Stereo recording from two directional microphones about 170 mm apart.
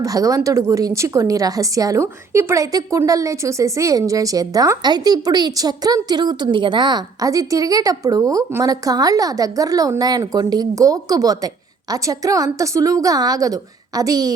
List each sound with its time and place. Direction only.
0.0 s a woman's voice: 20° right (ahead or behind)